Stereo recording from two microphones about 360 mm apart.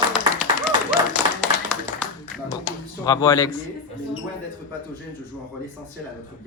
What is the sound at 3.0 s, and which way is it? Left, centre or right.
Speech, centre.